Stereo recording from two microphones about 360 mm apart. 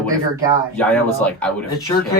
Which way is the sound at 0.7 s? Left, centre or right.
Centre.